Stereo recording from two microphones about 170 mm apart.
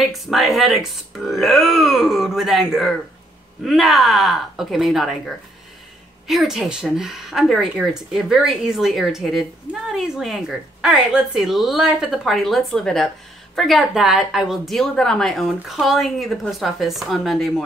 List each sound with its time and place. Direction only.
0.0 s speech: centre (ahead or behind)